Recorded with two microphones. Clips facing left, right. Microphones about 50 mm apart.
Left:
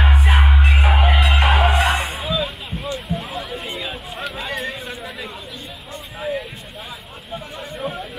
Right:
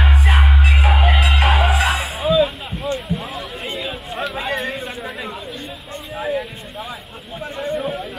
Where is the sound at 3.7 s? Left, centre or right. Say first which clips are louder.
Right 3 dB; centre.